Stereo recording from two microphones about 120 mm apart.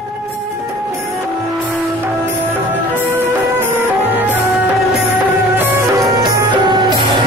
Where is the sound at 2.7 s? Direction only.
15° right (ahead or behind).